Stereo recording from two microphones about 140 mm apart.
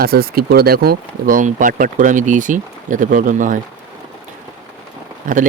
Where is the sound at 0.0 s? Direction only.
90° right; by 3.6 s 70° right (ahead or behind).